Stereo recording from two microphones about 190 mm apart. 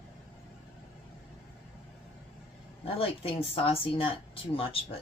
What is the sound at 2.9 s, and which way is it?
A woman's voice, 30° left (ahead or behind).